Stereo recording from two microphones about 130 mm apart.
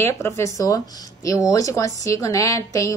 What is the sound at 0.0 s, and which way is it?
A woman's voice, 20° left (ahead or behind).